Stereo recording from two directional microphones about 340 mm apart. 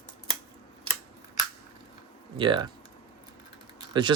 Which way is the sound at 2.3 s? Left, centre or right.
Centre.